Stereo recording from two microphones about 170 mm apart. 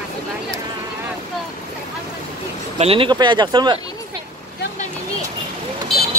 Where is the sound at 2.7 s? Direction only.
35° right (ahead or behind).